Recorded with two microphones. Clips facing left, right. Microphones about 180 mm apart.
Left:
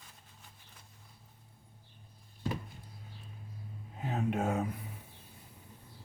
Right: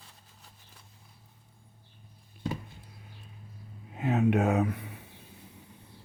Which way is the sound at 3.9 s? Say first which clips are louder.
Right 8 dB; 80° right.